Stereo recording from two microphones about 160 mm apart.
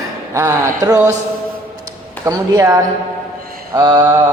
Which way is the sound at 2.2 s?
20° right (ahead or behind).